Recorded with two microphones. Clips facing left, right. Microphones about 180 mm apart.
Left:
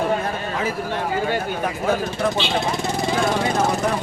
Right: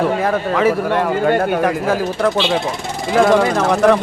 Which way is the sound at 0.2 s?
90° right.